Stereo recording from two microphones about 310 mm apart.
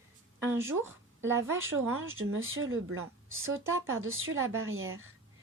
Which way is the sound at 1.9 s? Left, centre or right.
Right.